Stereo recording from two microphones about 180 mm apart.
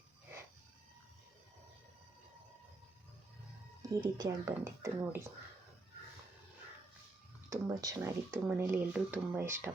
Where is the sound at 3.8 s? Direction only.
20° right (ahead or behind).